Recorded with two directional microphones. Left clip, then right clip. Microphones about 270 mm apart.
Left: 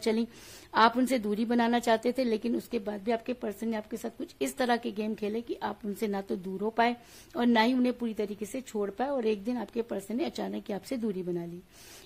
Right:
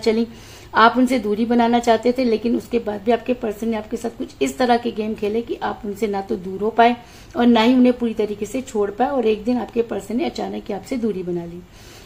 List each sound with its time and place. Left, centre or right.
0.0 s a woman's voice: left